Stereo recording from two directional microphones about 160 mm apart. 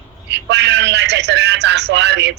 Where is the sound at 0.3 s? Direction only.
90° right.